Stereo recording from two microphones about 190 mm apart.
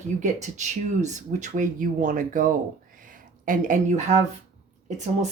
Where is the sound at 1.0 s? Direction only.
40° right (ahead or behind).